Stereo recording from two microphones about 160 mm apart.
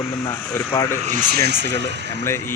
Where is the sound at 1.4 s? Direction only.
90° right.